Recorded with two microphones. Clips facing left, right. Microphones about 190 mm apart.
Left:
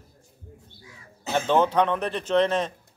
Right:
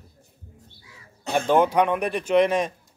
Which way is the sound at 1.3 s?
10° right (ahead or behind).